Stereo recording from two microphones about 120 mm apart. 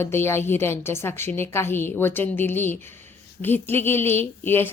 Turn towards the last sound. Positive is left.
turn(degrees=15)  # may be behind; listen again after turning